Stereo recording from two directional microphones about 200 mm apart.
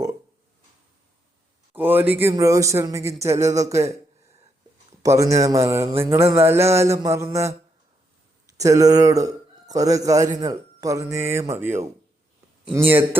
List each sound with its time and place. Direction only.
1.7 s speech: 10° right (ahead or behind)
5.0 s a man's voice: 15° right (ahead or behind)